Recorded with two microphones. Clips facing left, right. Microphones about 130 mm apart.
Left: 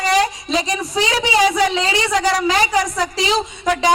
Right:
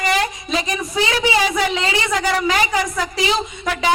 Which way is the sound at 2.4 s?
30° left (ahead or behind).